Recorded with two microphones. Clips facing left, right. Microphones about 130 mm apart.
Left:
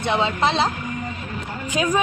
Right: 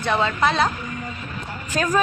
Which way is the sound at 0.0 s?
25° left (ahead or behind).